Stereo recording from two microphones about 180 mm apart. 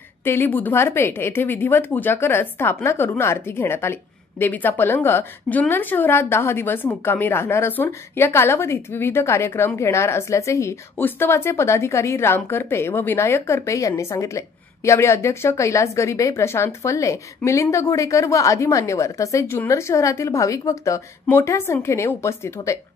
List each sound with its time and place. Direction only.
0.2 s a woman's voice: 10° left (ahead or behind)